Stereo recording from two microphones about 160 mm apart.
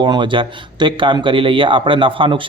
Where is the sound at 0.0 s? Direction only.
30° right (ahead or behind).